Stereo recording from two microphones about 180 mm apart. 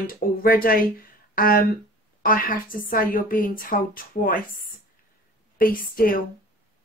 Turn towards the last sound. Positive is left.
turn(degrees=50)  # may be behind; listen again after turning